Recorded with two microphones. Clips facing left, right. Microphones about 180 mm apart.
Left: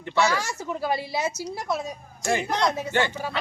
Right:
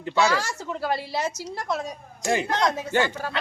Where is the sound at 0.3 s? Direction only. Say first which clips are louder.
Even; 10° left (ahead or behind).